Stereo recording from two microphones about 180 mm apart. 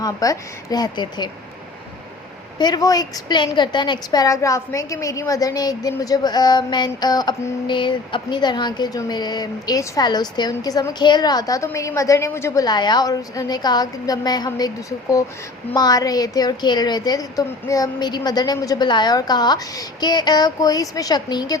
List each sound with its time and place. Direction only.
0.0 s a woman's voice: 20° left (ahead or behind)
2.6 s a woman's voice: 20° left (ahead or behind)